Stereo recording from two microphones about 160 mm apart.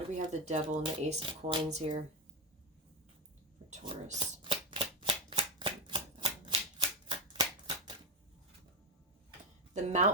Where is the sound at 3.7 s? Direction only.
45° right (ahead or behind).